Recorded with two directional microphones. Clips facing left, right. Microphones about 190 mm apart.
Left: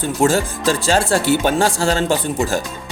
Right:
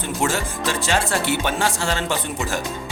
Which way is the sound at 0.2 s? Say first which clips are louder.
Left 7 dB; 35° left (ahead or behind).